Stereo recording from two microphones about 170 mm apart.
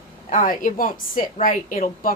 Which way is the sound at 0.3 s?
50° left (ahead or behind).